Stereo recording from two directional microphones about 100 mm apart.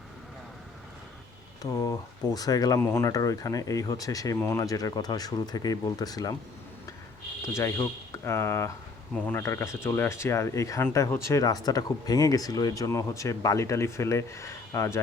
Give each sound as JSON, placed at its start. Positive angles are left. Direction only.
{"t": 1.7, "sound": "speech", "side_deg": 40}
{"t": 7.4, "sound": "speech", "side_deg": 30}
{"t": 9.1, "sound": "speech", "side_deg": 15}
{"t": 9.4, "sound": "speech", "side_deg": 30}